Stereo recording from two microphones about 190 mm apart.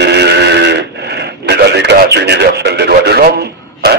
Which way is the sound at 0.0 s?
60° right (ahead or behind).